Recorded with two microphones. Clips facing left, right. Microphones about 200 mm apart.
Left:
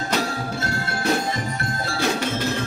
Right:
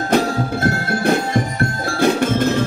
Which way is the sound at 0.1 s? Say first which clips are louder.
Right 9 dB; 55° right (ahead or behind).